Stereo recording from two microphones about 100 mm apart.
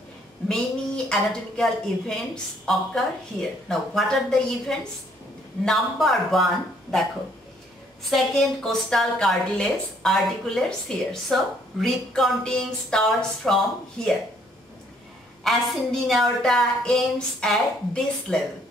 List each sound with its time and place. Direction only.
0.5 s a woman's voice: 5° left (ahead or behind)
15.4 s a woman's voice: centre (ahead or behind)